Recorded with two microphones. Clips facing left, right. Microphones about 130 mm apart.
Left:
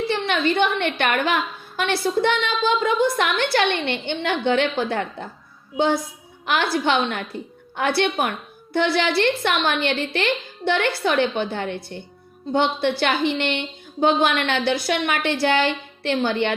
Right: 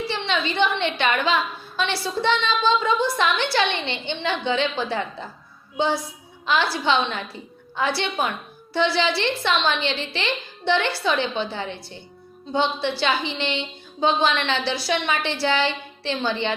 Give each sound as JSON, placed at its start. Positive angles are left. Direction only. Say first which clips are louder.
{"t": 0.1, "sound": "a woman's voice", "louder": "left 4 dB", "side_deg": 55}